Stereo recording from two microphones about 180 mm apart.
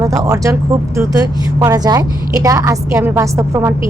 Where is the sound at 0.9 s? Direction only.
20° right (ahead or behind).